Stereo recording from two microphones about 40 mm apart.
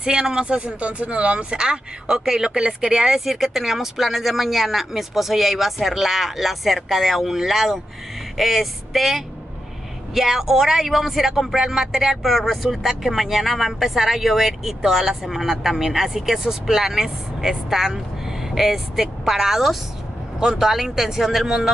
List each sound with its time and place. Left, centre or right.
0.0 s speech: centre
0.7 s speech: right
1.5 s speech: centre